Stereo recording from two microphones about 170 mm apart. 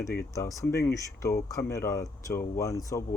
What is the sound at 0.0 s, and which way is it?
Speech, 15° left (ahead or behind).